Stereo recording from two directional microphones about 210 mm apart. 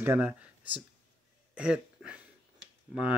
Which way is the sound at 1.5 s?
5° right (ahead or behind).